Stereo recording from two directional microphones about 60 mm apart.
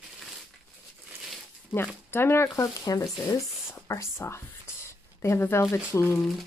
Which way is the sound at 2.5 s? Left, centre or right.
Left.